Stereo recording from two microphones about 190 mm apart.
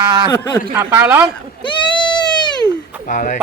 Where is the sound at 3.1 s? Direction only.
45° left (ahead or behind).